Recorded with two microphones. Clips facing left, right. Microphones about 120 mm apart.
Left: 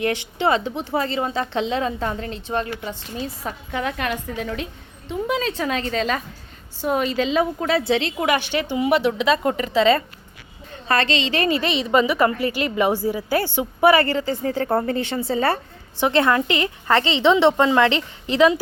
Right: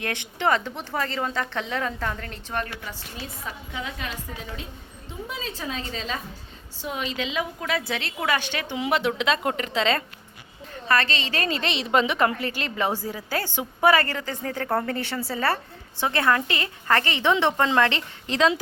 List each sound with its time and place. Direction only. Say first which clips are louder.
0.3 s a woman's voice: left 1 dB; 15° left (ahead or behind)
3.4 s a woman's voice: left 7 dB; 60° left (ahead or behind)
6.8 s a woman's voice: left 9 dB; 45° left (ahead or behind); by 8.5 s 15° left (ahead or behind)
8.7 s a woman's voice: left 5 dB; centre (ahead or behind)
10.8 s a woman's voice: left 2 dB; 30° left (ahead or behind)
11.1 s a woman's voice: left 7 dB; 45° right (ahead or behind)
11.4 s a woman's voice: left 6 dB; 5° left (ahead or behind)